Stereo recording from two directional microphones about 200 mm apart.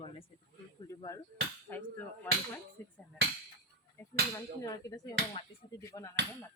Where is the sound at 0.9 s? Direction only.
15° left (ahead or behind).